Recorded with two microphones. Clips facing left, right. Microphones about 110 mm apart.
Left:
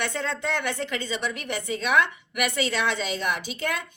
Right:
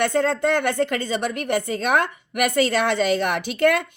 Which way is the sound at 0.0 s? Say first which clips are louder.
Right 9 dB; 45° right (ahead or behind).